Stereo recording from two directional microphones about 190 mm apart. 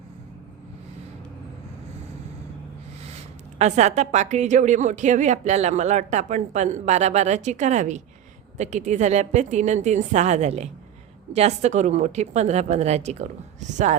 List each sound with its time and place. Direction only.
3.6 s a woman's voice: 35° right (ahead or behind)